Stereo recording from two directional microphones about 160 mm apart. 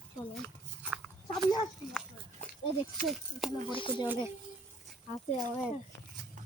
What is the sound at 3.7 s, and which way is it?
Speech, 30° left (ahead or behind).